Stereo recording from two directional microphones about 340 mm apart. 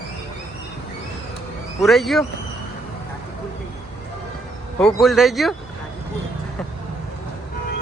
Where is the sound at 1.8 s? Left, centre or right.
Centre.